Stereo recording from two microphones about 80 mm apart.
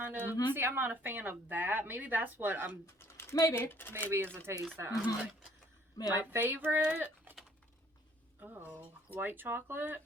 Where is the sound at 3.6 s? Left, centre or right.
Left.